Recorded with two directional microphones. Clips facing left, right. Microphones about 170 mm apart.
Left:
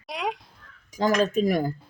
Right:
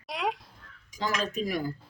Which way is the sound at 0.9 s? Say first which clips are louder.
Left 9 dB; 45° left (ahead or behind).